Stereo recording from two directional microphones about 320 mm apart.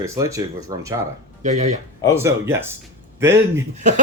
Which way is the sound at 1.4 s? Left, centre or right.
Right.